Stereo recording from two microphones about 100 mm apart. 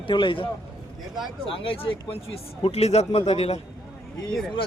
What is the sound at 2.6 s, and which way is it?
Speech, 90° left.